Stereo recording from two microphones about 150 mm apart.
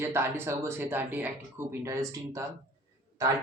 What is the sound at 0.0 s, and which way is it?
Speech, 15° right (ahead or behind).